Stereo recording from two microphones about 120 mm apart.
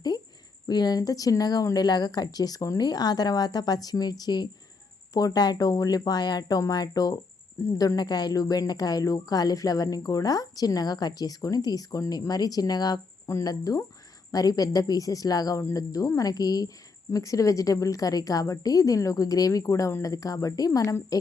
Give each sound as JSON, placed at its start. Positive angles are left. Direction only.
{"t": 0.7, "sound": "a woman's voice", "side_deg": 35}